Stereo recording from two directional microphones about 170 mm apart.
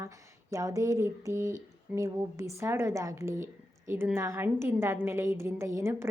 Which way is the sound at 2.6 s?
15° right (ahead or behind).